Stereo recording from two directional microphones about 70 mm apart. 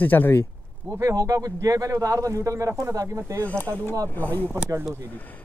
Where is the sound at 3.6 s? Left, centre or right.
Left.